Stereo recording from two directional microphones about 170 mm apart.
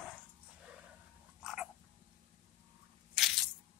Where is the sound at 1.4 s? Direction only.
5° right (ahead or behind).